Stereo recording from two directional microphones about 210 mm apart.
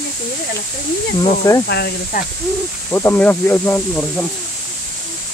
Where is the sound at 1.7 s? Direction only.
50° left (ahead or behind).